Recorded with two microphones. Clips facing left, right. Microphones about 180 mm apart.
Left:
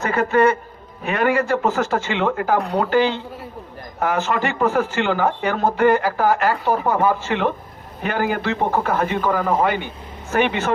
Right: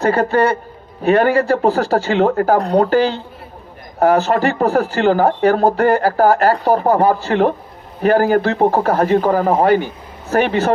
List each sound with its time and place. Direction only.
0.0 s speech: 35° right (ahead or behind)